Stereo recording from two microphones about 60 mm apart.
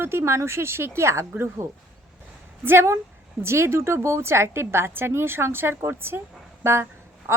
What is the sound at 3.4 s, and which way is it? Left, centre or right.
Speech, right.